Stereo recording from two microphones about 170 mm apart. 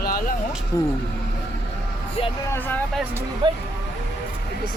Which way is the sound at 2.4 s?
15° left (ahead or behind).